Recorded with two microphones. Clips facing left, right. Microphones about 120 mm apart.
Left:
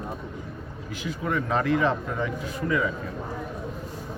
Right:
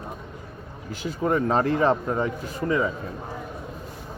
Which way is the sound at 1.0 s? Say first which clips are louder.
Right 5 dB; 35° right (ahead or behind).